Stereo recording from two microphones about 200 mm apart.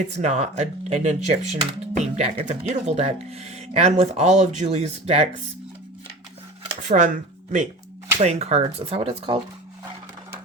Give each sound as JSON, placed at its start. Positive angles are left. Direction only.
{"t": 0.2, "sound": "speech", "side_deg": -35}
{"t": 6.8, "sound": "speech", "side_deg": -40}
{"t": 8.2, "sound": "speech", "side_deg": -30}